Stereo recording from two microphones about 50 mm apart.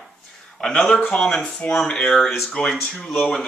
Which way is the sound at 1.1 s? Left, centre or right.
Centre.